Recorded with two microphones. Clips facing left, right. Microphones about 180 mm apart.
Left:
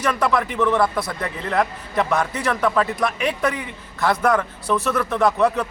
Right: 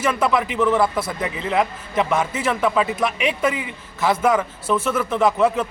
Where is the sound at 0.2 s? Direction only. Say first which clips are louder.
Right 1 dB; 15° right (ahead or behind).